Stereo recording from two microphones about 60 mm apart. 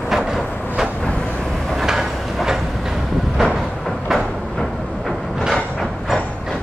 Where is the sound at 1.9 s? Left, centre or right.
Centre.